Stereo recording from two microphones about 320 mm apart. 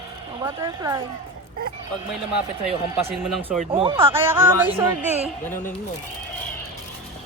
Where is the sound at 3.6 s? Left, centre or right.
Centre.